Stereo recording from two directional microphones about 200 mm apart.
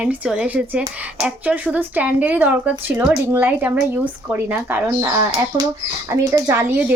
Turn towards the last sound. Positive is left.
turn(degrees=-10)  # may be behind; listen again after turning